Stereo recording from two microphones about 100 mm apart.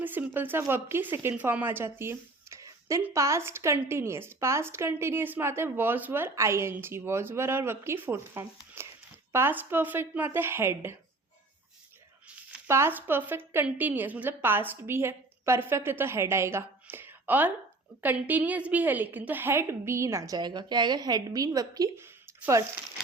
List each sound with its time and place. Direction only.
0.0 s a woman's voice: 20° right (ahead or behind)
8.8 s a sound: 25° right (ahead or behind)
9.3 s a woman's voice: 20° right (ahead or behind)
12.6 s a woman's voice: 25° right (ahead or behind)